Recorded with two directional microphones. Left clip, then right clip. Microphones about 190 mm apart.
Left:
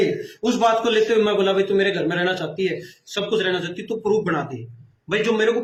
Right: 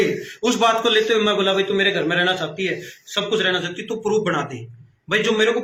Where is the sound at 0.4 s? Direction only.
15° left (ahead or behind).